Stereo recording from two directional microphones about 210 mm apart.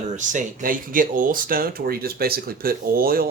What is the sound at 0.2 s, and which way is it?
Speech, 40° right (ahead or behind).